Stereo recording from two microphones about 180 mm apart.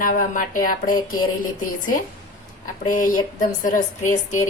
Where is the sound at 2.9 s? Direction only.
45° left (ahead or behind).